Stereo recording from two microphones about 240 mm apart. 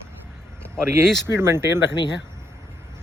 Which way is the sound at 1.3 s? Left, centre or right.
Centre.